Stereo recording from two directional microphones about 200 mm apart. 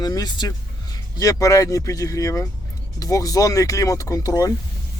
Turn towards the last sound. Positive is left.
turn(degrees=15)  # may be behind; listen again after turning